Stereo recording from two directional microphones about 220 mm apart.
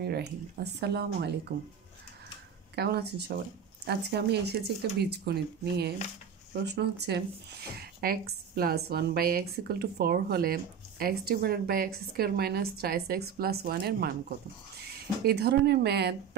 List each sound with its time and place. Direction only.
0.0 s a woman's voice: 45° right (ahead or behind)
2.7 s a woman's voice: 50° right (ahead or behind)